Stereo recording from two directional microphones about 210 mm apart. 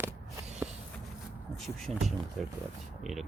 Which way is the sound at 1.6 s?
Centre (ahead or behind).